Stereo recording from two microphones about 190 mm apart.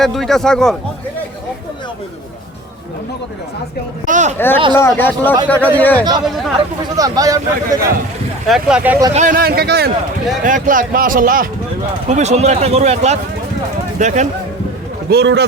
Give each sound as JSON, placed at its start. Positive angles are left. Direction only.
{"t": 0.0, "sound": "speech", "side_deg": 0}
{"t": 4.0, "sound": "speech", "side_deg": -40}
{"t": 4.8, "sound": "speech", "side_deg": 10}
{"t": 6.9, "sound": "speech", "side_deg": -20}
{"t": 8.4, "sound": "speech", "side_deg": -5}
{"t": 9.1, "sound": "speech", "side_deg": -45}
{"t": 10.4, "sound": "speech", "side_deg": -45}
{"t": 12.0, "sound": "speech", "side_deg": -35}
{"t": 15.1, "sound": "speech", "side_deg": -60}